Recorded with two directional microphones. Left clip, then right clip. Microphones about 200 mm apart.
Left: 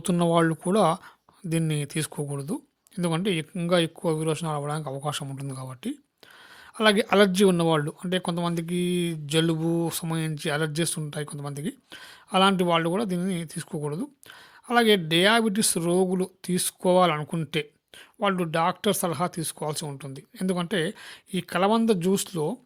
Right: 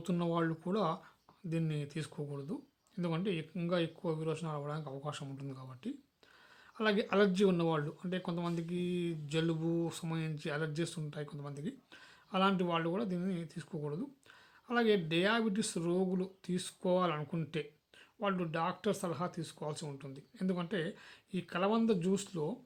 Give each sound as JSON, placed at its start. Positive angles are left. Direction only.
{"t": 0.0, "sound": "speech", "side_deg": 45}